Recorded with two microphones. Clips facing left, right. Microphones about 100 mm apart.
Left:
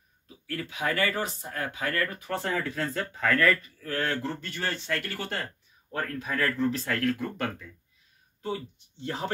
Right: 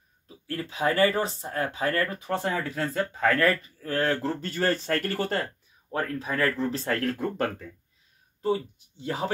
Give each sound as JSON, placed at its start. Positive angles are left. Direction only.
{"t": 0.3, "sound": "speech", "side_deg": -30}
{"t": 8.7, "sound": "speech", "side_deg": -10}